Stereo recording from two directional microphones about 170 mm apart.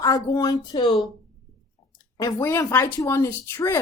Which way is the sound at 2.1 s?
20° left (ahead or behind).